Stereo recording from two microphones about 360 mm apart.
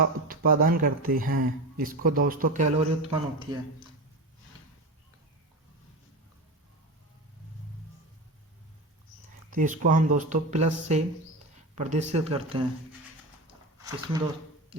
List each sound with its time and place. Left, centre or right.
0.0 s speech: right
9.5 s speech: right